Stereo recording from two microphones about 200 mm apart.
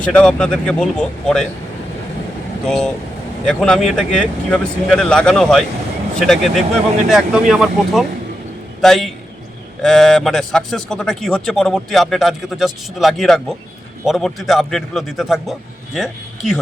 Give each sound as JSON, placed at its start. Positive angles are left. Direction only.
{"t": 0.0, "sound": "a man's voice", "side_deg": 5}
{"t": 2.6, "sound": "a man's voice", "side_deg": 5}